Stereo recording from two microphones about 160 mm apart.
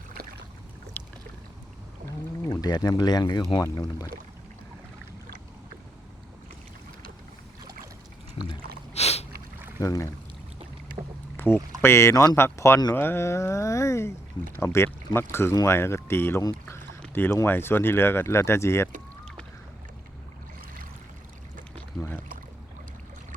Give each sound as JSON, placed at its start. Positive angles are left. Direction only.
{"t": 0.9, "sound": "boat", "side_deg": 10}
{"t": 2.4, "sound": "speech", "side_deg": 25}
{"t": 9.0, "sound": "a sound", "side_deg": 40}
{"t": 9.6, "sound": "boat", "side_deg": -15}
{"t": 9.8, "sound": "speech", "side_deg": 20}
{"t": 11.3, "sound": "boat", "side_deg": 15}
{"t": 11.8, "sound": "speech", "side_deg": 15}
{"t": 21.8, "sound": "pour", "side_deg": 10}